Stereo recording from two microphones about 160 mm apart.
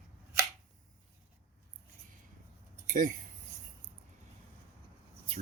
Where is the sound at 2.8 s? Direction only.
55° right (ahead or behind).